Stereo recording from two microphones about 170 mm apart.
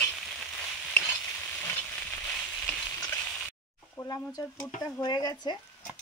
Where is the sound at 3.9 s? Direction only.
20° left (ahead or behind).